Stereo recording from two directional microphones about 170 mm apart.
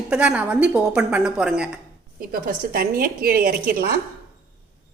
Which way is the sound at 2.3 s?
60° right (ahead or behind).